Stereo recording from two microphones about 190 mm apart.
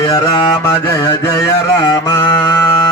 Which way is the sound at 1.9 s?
20° left (ahead or behind).